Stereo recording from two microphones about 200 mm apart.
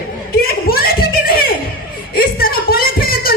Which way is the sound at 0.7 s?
50° left (ahead or behind).